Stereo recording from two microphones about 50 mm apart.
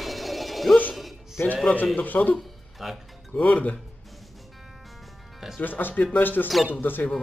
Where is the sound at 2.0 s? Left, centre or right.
Left.